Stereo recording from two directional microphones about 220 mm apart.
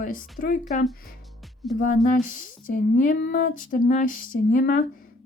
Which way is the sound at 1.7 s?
35° left (ahead or behind).